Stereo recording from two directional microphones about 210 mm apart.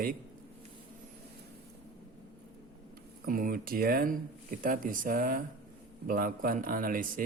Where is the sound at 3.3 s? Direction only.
40° right (ahead or behind).